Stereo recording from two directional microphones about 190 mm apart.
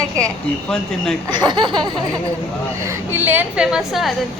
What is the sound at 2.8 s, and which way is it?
A woman's voice, 15° right (ahead or behind).